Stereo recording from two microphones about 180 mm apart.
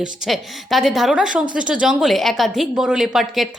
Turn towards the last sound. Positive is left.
turn(degrees=0)  # may be behind; listen again after turning